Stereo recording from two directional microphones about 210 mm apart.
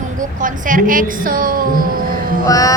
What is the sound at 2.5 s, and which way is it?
Music, 15° left (ahead or behind).